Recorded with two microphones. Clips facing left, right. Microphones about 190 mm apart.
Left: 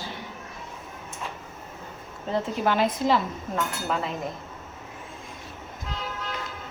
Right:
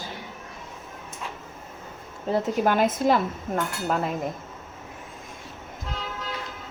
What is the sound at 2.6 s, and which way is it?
Speech, 50° right (ahead or behind).